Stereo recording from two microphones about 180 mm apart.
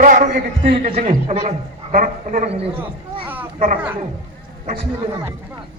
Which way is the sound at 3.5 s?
45° right (ahead or behind).